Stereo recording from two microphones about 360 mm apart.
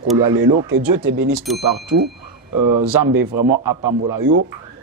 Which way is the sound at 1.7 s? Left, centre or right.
Right.